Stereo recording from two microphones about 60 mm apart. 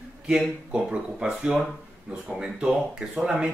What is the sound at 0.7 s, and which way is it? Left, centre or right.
Speech, centre.